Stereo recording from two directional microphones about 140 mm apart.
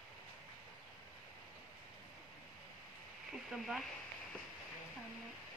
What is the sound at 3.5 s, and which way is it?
Speech, centre (ahead or behind).